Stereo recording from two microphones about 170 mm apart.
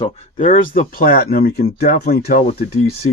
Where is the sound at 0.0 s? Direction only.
45° left (ahead or behind).